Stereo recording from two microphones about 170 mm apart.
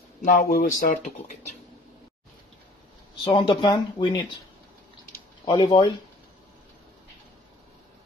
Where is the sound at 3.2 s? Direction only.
25° left (ahead or behind).